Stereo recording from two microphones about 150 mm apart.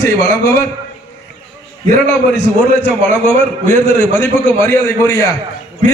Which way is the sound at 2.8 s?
15° left (ahead or behind).